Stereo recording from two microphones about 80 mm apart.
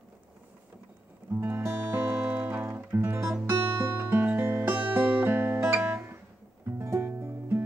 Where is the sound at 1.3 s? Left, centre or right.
Right.